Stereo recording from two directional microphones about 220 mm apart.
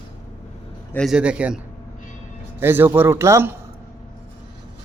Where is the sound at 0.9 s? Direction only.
Centre (ahead or behind).